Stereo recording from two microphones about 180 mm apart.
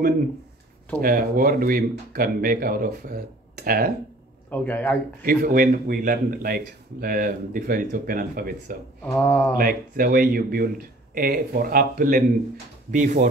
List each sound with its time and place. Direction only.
1.0 s a man's voice: 50° right (ahead or behind)
4.5 s speech: 10° left (ahead or behind)
5.2 s a man's voice: 55° right (ahead or behind)
9.0 s speech: 10° left (ahead or behind)
9.6 s a man's voice: 55° right (ahead or behind)
12.9 s a man's voice: 45° right (ahead or behind)